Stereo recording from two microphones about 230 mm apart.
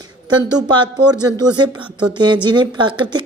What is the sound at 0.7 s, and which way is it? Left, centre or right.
Speech, centre.